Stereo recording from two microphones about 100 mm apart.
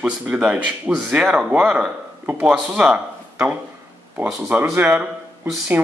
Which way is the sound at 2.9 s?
15° right (ahead or behind).